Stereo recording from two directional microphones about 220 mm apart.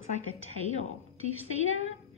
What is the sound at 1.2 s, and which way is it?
Speech, 65° left (ahead or behind).